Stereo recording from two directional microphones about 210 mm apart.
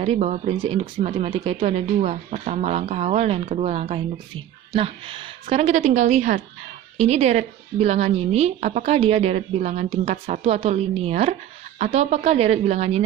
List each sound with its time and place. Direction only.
0.0 s speech: 30° right (ahead or behind)